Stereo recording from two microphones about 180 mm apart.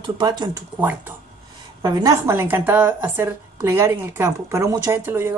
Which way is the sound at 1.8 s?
15° right (ahead or behind).